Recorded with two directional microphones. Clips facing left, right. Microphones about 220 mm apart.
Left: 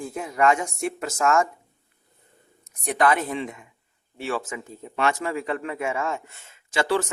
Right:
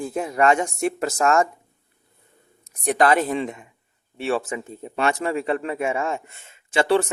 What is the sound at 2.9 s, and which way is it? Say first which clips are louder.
Speech: right 3 dB; 35° right (ahead or behind).